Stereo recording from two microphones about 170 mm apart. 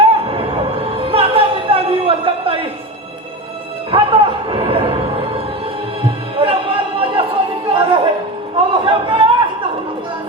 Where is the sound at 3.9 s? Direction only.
30° right (ahead or behind).